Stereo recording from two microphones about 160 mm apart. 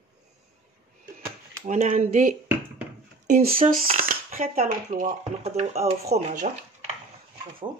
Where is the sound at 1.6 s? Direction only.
50° right (ahead or behind).